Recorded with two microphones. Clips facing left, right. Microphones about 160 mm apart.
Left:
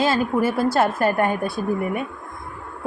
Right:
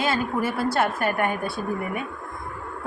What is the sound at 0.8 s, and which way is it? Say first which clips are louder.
Speech: left 4 dB; 30° left (ahead or behind).